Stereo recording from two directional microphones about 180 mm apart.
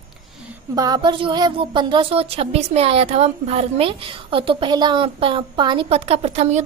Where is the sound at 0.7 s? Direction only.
20° right (ahead or behind).